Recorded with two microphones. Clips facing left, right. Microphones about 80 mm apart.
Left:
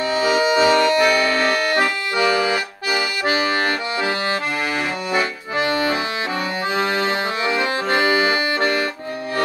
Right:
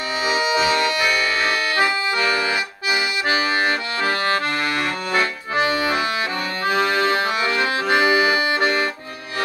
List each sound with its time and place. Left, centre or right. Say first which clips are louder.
0.3 s accordion: left 3 dB; left
6.7 s accordion: right 3 dB; left